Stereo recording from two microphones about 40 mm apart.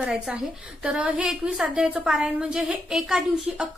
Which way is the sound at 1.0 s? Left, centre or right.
Right.